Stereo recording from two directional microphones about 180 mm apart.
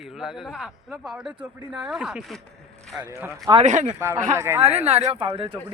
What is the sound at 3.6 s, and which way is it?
Speech, 45° right (ahead or behind).